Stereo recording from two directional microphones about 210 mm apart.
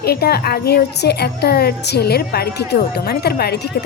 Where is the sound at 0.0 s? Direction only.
50° left (ahead or behind).